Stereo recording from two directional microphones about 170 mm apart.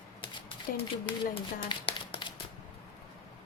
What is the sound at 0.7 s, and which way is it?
Speech, 60° left (ahead or behind).